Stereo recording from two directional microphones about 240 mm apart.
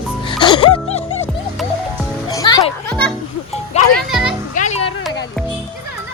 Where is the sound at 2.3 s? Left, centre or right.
Centre.